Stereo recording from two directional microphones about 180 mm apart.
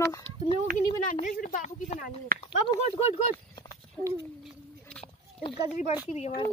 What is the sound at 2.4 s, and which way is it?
Speech, 30° left (ahead or behind).